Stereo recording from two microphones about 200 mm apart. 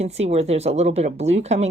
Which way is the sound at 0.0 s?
30° right (ahead or behind).